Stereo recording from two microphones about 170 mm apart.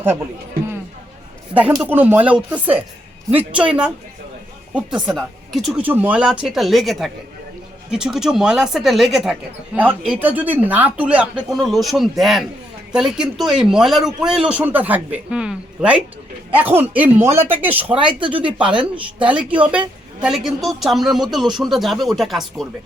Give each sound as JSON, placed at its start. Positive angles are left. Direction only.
{"t": 1.8, "sound": "speech", "side_deg": -10}
{"t": 4.7, "sound": "speech", "side_deg": -5}
{"t": 17.9, "sound": "a woman's voice", "side_deg": -30}
{"t": 19.2, "sound": "speech", "side_deg": -5}